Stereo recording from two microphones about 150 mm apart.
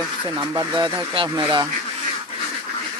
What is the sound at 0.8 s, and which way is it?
Speech, 30° right (ahead or behind).